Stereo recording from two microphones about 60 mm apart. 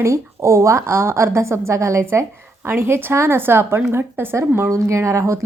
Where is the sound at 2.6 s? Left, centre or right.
Right.